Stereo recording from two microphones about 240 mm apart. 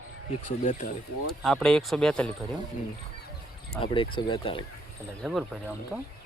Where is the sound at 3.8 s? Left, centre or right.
Left.